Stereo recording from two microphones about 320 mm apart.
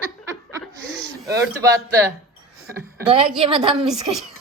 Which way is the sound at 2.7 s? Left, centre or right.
Centre.